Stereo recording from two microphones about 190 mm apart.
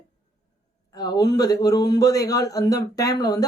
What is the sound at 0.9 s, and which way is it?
Speech, 20° left (ahead or behind).